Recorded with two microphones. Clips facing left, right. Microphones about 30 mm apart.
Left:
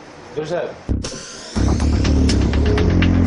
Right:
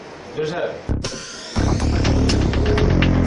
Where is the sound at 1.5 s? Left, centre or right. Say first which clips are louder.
Left 1 dB; centre.